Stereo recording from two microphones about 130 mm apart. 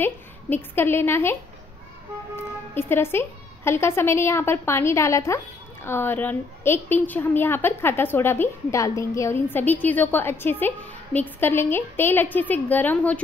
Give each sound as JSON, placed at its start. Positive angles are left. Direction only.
{"t": 0.0, "sound": "speech", "side_deg": 15}
{"t": 2.3, "sound": "speech", "side_deg": 15}